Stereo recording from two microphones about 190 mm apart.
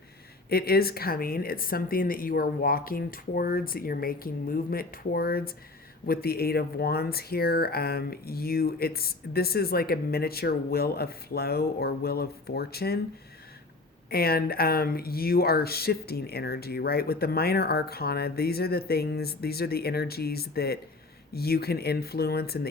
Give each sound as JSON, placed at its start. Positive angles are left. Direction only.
{"t": 0.5, "sound": "speech", "side_deg": 55}
{"t": 14.1, "sound": "speech", "side_deg": 55}